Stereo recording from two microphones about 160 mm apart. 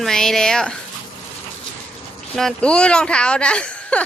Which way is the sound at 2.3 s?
5° left (ahead or behind).